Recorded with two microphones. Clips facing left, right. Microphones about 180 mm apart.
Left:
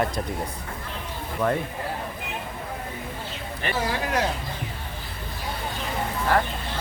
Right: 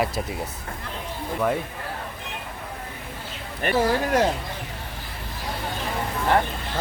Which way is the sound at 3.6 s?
50° right (ahead or behind).